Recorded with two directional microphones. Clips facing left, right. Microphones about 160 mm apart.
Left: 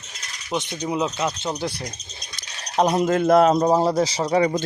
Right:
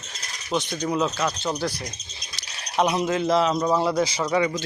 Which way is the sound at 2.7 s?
40° left (ahead or behind).